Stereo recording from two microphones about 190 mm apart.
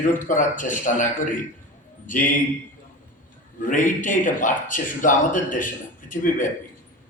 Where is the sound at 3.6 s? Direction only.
45° left (ahead or behind).